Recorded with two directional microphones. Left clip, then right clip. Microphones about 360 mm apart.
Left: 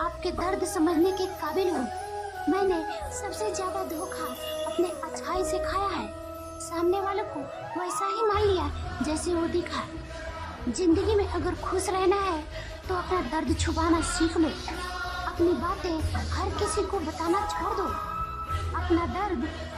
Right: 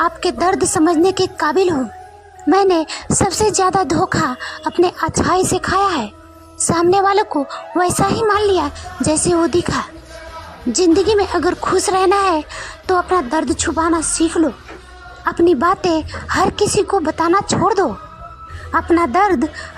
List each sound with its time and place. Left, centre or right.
0.0 s a woman's voice: centre
15.6 s speech: right
18.7 s speech: right